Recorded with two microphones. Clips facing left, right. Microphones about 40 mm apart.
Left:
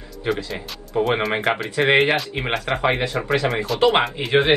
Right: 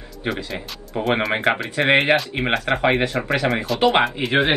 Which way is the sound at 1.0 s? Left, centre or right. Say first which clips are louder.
Left 1 dB; centre.